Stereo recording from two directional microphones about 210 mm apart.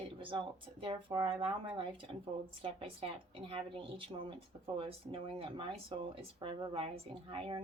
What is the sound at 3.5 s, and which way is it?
Speech, 25° right (ahead or behind).